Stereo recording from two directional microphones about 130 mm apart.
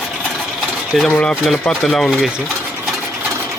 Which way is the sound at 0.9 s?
5° left (ahead or behind).